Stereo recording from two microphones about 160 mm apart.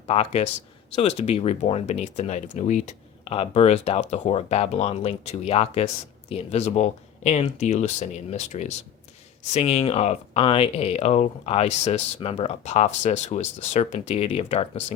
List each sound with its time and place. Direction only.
0.1 s speech: 40° left (ahead or behind)